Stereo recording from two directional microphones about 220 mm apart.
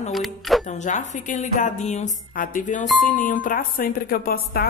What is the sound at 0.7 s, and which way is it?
Speech, 35° left (ahead or behind).